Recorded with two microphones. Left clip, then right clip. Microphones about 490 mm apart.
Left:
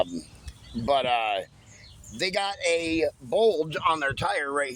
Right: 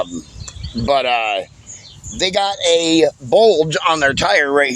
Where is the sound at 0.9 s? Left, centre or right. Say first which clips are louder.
Right 8 dB; left.